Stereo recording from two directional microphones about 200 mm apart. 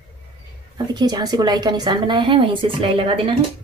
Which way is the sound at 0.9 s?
20° right (ahead or behind).